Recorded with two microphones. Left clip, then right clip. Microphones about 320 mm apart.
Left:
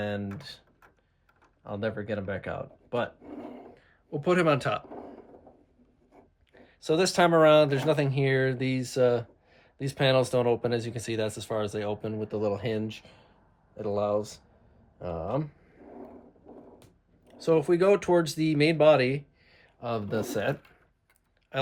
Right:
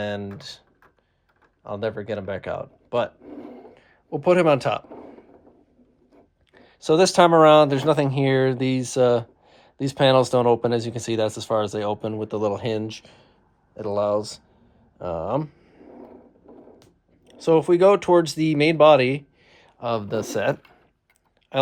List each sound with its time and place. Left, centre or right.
0.0 s speech: right
1.6 s speech: right
6.5 s speech: right
17.2 s speech: centre